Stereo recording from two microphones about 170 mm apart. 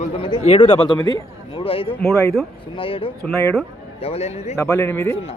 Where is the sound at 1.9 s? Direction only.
15° left (ahead or behind).